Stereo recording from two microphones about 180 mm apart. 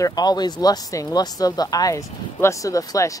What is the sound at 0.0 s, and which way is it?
Speech, 25° left (ahead or behind).